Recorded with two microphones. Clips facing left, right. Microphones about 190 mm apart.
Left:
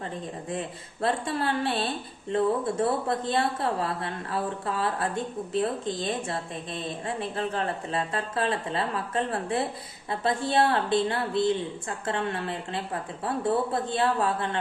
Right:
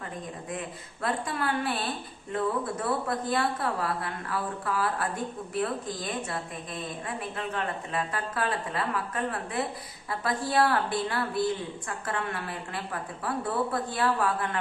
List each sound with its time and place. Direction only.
1.0 s a woman's voice: 30° left (ahead or behind)